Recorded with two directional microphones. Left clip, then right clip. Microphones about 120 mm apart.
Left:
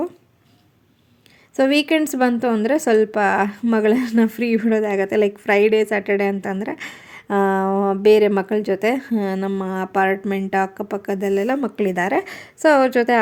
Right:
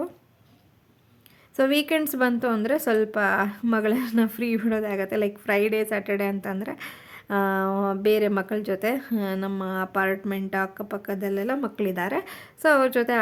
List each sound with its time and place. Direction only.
1.5 s a woman's voice: 25° left (ahead or behind)